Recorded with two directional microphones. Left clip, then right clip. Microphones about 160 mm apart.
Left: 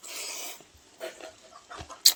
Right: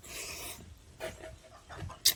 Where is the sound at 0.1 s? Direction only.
5° right (ahead or behind).